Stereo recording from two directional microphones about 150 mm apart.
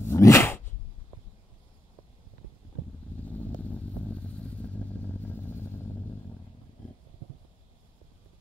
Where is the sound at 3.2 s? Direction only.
10° left (ahead or behind).